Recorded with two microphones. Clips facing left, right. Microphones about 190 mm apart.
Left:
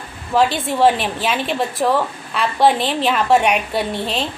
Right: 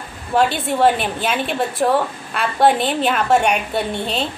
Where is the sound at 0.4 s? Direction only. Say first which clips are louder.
Left 1 dB; centre (ahead or behind).